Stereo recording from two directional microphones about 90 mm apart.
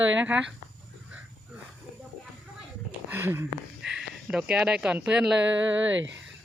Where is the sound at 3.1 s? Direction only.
25° right (ahead or behind).